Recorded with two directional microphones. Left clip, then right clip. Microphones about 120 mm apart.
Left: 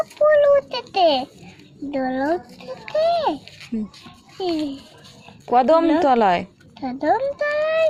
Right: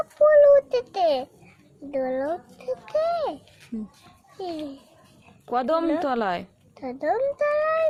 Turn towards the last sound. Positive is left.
turn(degrees=-40)  # may be behind; listen again after turning